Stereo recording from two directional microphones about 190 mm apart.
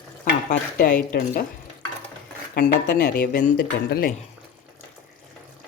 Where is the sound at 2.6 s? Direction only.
50° left (ahead or behind).